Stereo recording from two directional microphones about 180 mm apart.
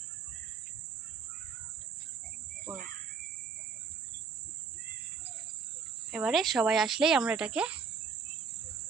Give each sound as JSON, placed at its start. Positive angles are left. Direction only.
{"t": 2.7, "sound": "speech", "side_deg": -25}
{"t": 6.1, "sound": "speech", "side_deg": -5}